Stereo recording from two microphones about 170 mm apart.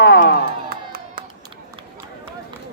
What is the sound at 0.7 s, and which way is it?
Music, 60° right (ahead or behind).